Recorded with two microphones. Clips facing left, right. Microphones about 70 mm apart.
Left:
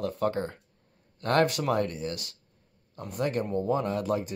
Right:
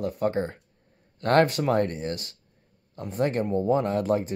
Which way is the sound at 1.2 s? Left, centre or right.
Right.